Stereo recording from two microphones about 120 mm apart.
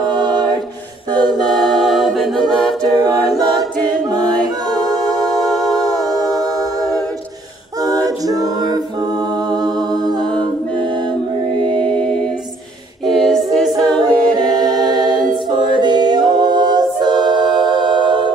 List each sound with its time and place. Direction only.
0.1 s a capella: 35° right (ahead or behind)
1.5 s a capella: centre (ahead or behind)
7.8 s a capella: 30° right (ahead or behind)
11.6 s music: 10° left (ahead or behind)
13.1 s a capella: 5° left (ahead or behind)
15.8 s music: 35° right (ahead or behind)